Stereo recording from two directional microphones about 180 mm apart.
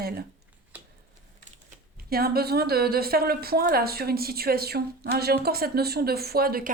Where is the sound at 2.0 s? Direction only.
60° right (ahead or behind).